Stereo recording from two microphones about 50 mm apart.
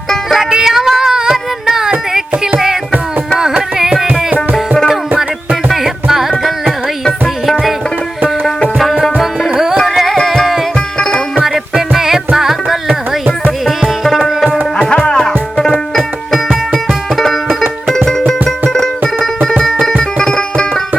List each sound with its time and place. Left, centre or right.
0.3 s music: centre
3.8 s music: centre
5.6 s music: centre
8.8 s music: centre
9.7 s carnatic music: centre
10.2 s music: centre
10.8 s music: centre
11.4 s music: centre
12.9 s music: right
13.7 s tabla: centre
14.8 s music: centre